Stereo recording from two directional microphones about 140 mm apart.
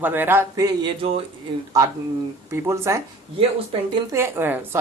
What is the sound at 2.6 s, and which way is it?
Speech, 20° right (ahead or behind).